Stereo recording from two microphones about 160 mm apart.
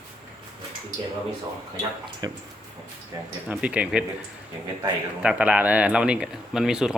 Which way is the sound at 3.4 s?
10° right (ahead or behind).